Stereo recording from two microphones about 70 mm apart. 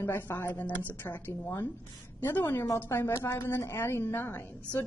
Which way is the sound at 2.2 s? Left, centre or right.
Left.